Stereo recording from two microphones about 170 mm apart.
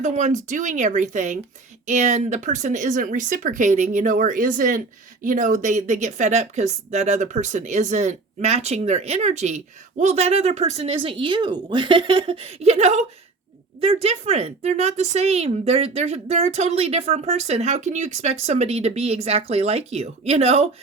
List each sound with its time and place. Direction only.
0.0 s a woman's voice: 45° right (ahead or behind)